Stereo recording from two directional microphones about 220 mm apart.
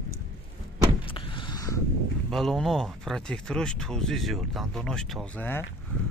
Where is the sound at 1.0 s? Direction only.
25° left (ahead or behind).